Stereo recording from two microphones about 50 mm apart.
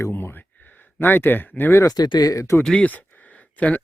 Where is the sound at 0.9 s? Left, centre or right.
Left.